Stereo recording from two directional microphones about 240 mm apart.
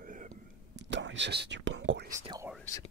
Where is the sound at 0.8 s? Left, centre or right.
Right.